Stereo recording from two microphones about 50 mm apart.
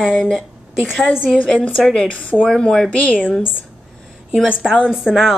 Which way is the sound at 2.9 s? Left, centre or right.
Left.